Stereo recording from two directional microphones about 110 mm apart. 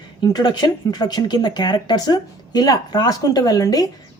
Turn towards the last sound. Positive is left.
turn(degrees=35)  # may be behind; listen again after turning